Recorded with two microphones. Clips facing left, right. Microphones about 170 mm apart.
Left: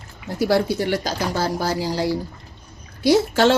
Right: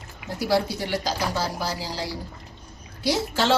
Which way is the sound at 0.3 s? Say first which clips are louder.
Left 5 dB; 55° left (ahead or behind).